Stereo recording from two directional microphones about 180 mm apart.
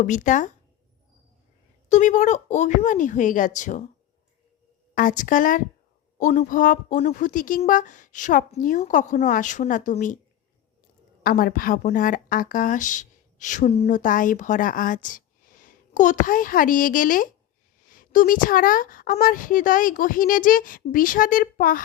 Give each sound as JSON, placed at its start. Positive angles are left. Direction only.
{"t": 0.0, "sound": "a woman's voice", "side_deg": 45}
{"t": 1.9, "sound": "a woman's voice", "side_deg": 45}
{"t": 4.9, "sound": "a woman's voice", "side_deg": 45}
{"t": 11.2, "sound": "a woman's voice", "side_deg": 55}